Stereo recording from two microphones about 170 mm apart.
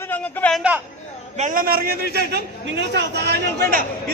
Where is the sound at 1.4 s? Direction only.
55° right (ahead or behind); by 3.8 s 75° right (ahead or behind).